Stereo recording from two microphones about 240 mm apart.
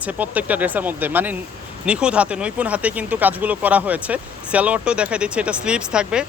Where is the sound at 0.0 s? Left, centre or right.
Centre.